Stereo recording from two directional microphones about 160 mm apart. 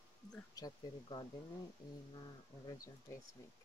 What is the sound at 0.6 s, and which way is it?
Speech, 25° left (ahead or behind).